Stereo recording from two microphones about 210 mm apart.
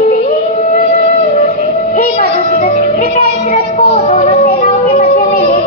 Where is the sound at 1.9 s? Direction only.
40° left (ahead or behind).